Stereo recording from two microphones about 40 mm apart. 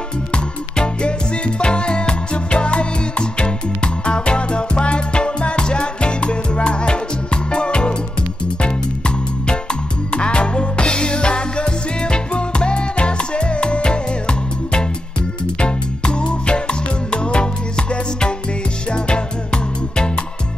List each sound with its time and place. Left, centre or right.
0.3 s music: left